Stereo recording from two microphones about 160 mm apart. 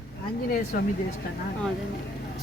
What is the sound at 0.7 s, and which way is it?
Speech, 60° left (ahead or behind).